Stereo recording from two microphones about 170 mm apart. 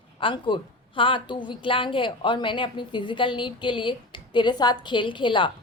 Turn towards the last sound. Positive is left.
turn(degrees=30)  # may be behind; listen again after turning